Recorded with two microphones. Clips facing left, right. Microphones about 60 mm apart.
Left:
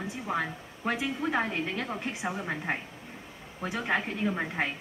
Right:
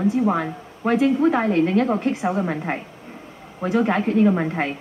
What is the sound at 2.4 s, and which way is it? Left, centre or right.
Speech, centre.